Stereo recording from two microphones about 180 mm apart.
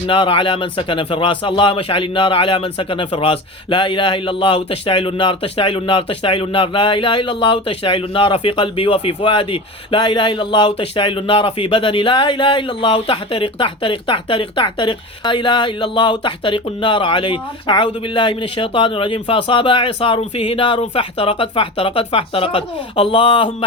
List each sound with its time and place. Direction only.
0.1 s speech: 25° left (ahead or behind)